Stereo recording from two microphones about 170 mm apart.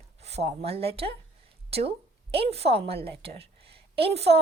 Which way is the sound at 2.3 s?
35° right (ahead or behind).